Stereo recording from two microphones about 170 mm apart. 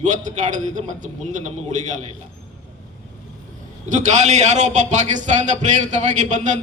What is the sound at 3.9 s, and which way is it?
A man's voice, 45° right (ahead or behind).